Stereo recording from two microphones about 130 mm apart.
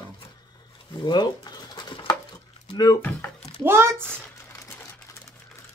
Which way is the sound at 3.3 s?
50° left (ahead or behind).